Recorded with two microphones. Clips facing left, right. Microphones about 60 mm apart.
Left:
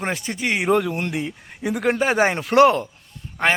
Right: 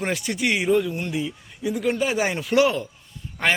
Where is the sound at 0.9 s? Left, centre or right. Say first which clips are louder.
Left 2 dB; left.